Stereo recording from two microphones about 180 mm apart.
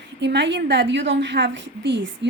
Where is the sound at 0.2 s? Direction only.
75° right (ahead or behind).